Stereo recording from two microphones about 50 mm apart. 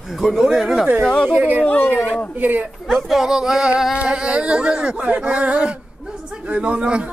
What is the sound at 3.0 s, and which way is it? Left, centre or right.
A man's voice, centre.